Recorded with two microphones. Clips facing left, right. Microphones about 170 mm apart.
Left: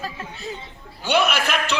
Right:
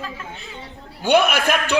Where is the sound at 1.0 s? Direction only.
50° right (ahead or behind).